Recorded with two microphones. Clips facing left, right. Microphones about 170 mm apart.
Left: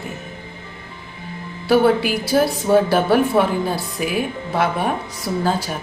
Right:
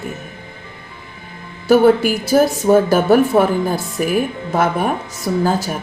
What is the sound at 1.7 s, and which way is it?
A woman's voice, 45° right (ahead or behind).